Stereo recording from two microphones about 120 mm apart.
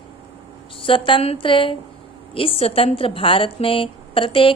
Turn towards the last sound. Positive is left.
turn(degrees=45)  # may be behind; listen again after turning